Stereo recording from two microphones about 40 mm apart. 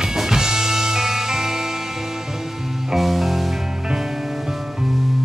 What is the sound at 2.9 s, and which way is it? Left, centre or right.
Music, centre.